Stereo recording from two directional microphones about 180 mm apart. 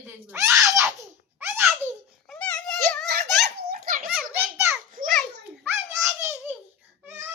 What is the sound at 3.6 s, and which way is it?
Giggle, 55° right (ahead or behind).